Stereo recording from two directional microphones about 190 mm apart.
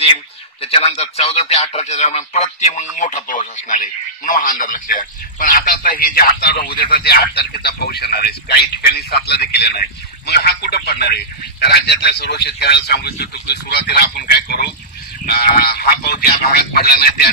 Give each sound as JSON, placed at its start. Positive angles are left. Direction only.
{"t": 0.0, "sound": "speech", "side_deg": 30}